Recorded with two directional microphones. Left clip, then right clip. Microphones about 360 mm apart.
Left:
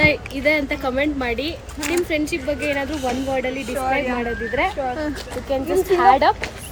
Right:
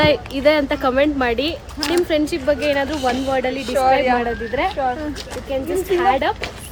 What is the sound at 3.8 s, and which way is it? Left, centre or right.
Speech, right.